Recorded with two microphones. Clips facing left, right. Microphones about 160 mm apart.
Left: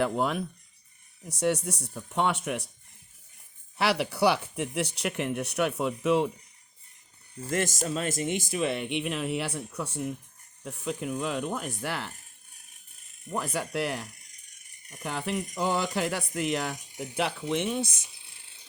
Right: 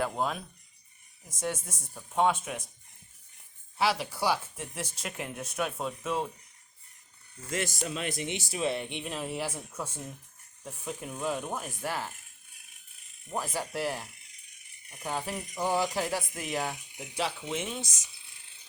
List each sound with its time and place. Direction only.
0.0 s speech: 70° left (ahead or behind)
3.8 s speech: 65° left (ahead or behind)
7.5 s speech: 45° left (ahead or behind); by 12.0 s 70° left (ahead or behind)
13.3 s speech: 65° left (ahead or behind)
15.5 s speech: 70° left (ahead or behind)
16.3 s speech: 75° left (ahead or behind)
16.7 s speech: 40° left (ahead or behind)
17.5 s speech: 60° left (ahead or behind)